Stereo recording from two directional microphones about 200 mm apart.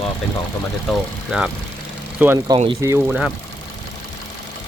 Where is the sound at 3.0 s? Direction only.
5° right (ahead or behind).